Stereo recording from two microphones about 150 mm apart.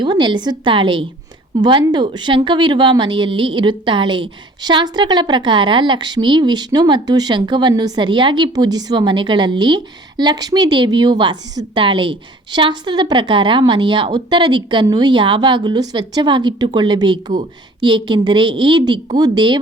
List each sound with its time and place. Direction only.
0.0 s a woman's voice: 30° right (ahead or behind)